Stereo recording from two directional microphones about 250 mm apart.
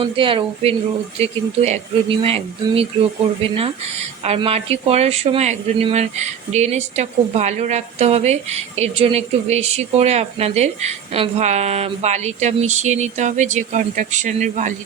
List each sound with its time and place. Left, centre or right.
0.0 s speech: right